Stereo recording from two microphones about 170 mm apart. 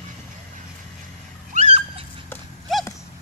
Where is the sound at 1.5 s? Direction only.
40° right (ahead or behind).